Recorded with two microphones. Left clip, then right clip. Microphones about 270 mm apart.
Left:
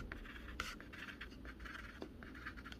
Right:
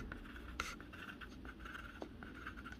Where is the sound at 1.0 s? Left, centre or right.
Left.